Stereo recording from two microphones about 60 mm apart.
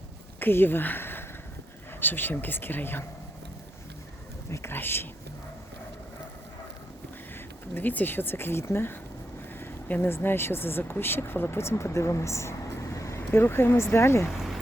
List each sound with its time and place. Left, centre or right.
0.3 s speech: left
4.5 s speech: left
7.7 s speech: left
9.6 s a sound: left
10.2 s speech: left
13.3 s speech: left
14.3 s a sound: centre